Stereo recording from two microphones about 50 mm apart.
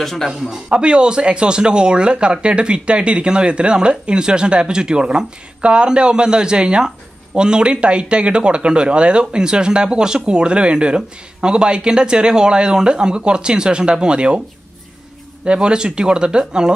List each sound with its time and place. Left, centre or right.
0.0 s speech: centre
0.4 s speech: centre
15.4 s speech: centre